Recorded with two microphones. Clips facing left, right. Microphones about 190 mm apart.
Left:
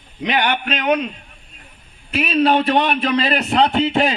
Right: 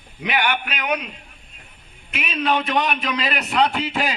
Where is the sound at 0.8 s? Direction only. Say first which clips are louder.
Left 8 dB; 25° left (ahead or behind).